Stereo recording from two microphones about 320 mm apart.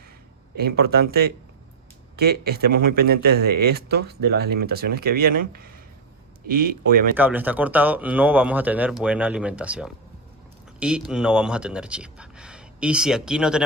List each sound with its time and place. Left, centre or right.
0.5 s speech: right
2.1 s speech: right
7.2 s speech: centre